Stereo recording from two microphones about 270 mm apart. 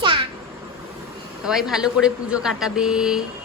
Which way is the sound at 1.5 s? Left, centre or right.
Centre.